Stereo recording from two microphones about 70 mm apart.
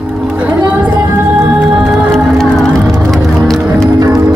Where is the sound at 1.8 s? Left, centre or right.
Centre.